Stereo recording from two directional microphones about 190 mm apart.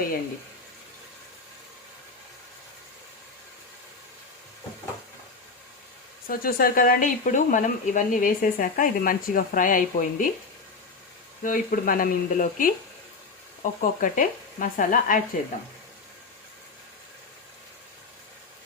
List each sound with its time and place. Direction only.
6.2 s speech: 50° left (ahead or behind)
11.4 s speech: 45° left (ahead or behind)